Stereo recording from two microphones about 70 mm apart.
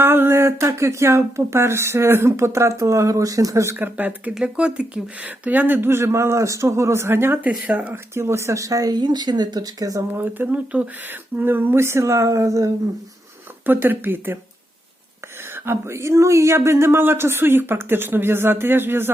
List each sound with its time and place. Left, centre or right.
0.0 s speech: right
3.8 s speech: right
4.4 s speech: centre; by 7.3 s right
7.7 s speech: right
8.1 s speech: right
10.2 s speech: right
13.7 s speech: right
15.5 s speech: right